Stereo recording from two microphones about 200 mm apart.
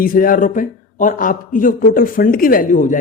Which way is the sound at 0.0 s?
45° left (ahead or behind).